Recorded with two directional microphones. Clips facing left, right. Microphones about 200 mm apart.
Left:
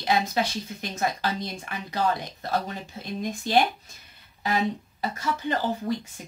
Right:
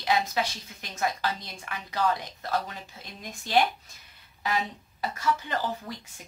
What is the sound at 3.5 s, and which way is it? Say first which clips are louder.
Speech: left 2 dB; 25° left (ahead or behind).